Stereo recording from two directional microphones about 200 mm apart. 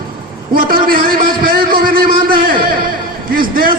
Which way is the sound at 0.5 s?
45° right (ahead or behind).